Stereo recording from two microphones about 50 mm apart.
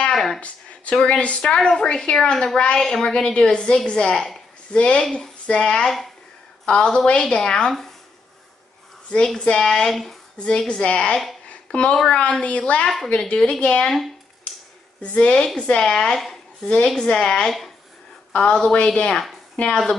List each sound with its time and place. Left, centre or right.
0.1 s speech: centre
0.9 s a woman's voice: left
9.4 s a woman's voice: centre
10.3 s a woman's voice: centre
11.4 s a sound: left
12.1 s a woman's voice: left
12.8 s a woman's voice: centre; by 13.9 s left
15.0 s a woman's voice: left
15.3 s a woman's voice: centre